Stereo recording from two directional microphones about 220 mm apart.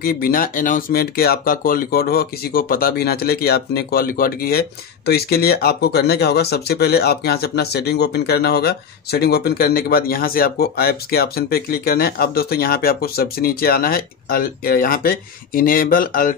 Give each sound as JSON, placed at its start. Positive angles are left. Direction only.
{"t": 0.0, "sound": "speech", "side_deg": 40}